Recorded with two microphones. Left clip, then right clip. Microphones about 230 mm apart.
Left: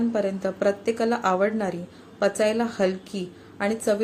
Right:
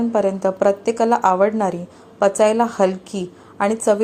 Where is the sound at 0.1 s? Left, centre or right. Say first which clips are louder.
Right 8 dB; centre.